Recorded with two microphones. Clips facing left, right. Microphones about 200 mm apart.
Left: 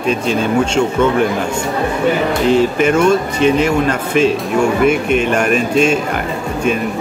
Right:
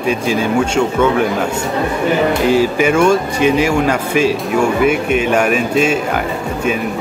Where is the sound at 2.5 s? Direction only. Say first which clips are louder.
Left 3 dB; 10° right (ahead or behind).